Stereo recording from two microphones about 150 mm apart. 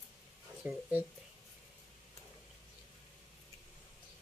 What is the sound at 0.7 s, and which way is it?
Speech, 5° right (ahead or behind).